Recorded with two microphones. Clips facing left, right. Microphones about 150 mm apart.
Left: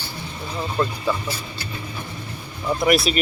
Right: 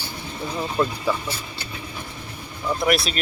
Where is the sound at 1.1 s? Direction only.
10° right (ahead or behind).